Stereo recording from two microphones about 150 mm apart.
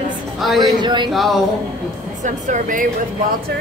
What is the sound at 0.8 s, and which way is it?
Speech, 30° right (ahead or behind).